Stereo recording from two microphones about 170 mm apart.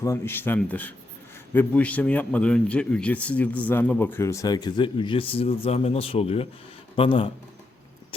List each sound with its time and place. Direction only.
0.0 s a man's voice: 15° left (ahead or behind); by 7.3 s 30° left (ahead or behind)